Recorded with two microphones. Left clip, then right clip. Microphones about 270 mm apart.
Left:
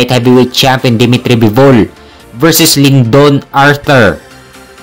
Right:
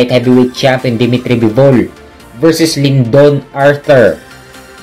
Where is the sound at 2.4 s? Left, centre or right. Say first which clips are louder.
Left 3 dB; left.